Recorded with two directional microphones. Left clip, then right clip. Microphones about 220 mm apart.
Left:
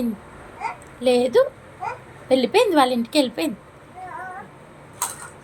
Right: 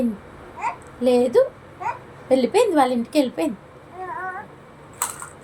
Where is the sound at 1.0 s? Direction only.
5° right (ahead or behind).